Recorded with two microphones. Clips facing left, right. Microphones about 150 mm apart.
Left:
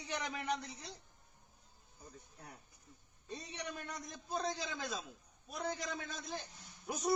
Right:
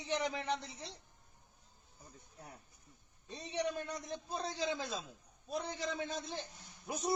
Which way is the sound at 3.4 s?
30° right (ahead or behind).